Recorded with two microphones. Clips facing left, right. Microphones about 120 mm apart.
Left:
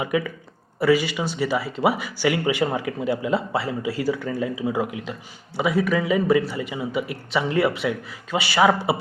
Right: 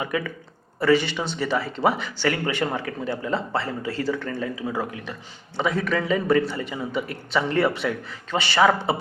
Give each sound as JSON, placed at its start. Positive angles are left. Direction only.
{"t": 0.0, "sound": "speech", "side_deg": 15}